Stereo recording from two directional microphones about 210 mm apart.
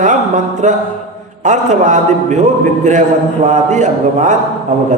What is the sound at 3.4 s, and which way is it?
Speech, 35° right (ahead or behind).